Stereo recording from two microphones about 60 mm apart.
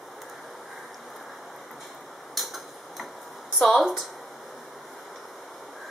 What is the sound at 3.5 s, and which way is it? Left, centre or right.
Speech, centre.